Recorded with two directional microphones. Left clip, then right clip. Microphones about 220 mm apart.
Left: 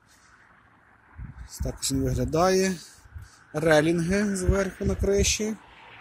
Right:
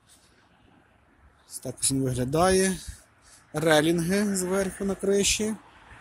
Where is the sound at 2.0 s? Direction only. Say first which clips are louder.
Even; centre (ahead or behind).